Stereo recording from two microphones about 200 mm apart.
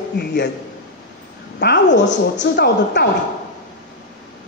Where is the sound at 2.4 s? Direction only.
60° left (ahead or behind).